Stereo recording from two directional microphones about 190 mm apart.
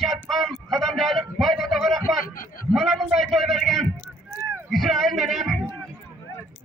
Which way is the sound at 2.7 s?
Centre (ahead or behind).